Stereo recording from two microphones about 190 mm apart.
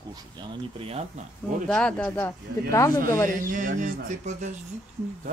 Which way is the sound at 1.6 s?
5° left (ahead or behind).